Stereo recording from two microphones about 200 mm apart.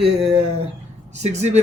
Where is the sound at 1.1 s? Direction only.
35° right (ahead or behind).